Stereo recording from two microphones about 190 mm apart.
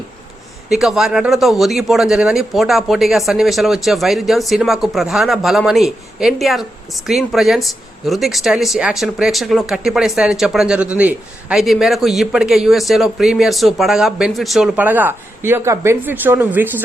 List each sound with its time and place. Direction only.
0.7 s speech: centre (ahead or behind)